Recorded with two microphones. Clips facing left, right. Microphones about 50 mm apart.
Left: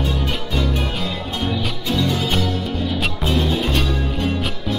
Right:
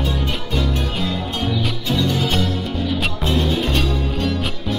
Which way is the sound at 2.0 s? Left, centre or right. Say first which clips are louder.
Even; left.